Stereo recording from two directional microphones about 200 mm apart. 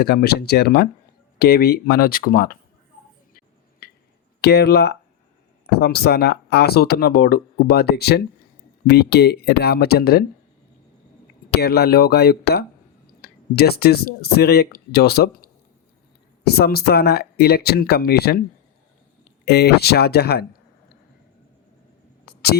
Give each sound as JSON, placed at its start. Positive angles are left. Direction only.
{"t": 0.0, "sound": "speech", "side_deg": 50}
{"t": 3.3, "sound": "a sound", "side_deg": 50}
{"t": 4.4, "sound": "speech", "side_deg": 55}
{"t": 11.5, "sound": "speech", "side_deg": 55}
{"t": 19.5, "sound": "speech", "side_deg": 55}
{"t": 22.3, "sound": "a sound", "side_deg": 50}